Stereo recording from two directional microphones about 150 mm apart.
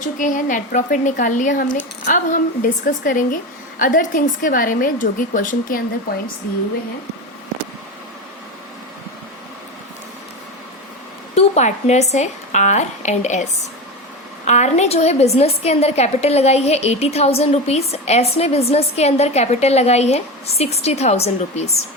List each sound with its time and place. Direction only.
0.0 s a woman's voice: 60° left (ahead or behind)
11.3 s a woman's voice: 50° left (ahead or behind)